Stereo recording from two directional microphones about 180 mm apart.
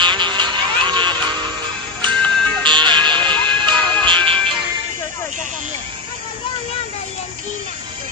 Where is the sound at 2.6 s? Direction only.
25° right (ahead or behind).